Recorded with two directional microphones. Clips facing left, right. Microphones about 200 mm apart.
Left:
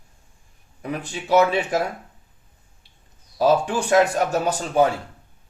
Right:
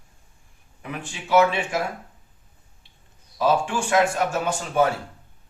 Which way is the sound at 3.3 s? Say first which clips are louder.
Left 3 dB; 40° left (ahead or behind).